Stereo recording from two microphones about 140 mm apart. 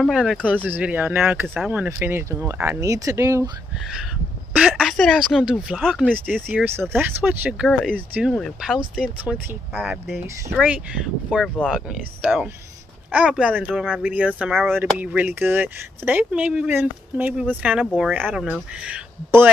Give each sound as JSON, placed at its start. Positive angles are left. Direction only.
{"t": 0.0, "sound": "speech", "side_deg": 0}
{"t": 0.7, "sound": "speech", "side_deg": -15}
{"t": 4.6, "sound": "speech", "side_deg": 0}
{"t": 6.5, "sound": "speech", "side_deg": -15}
{"t": 11.3, "sound": "speech", "side_deg": 5}
{"t": 11.9, "sound": "speech", "side_deg": -5}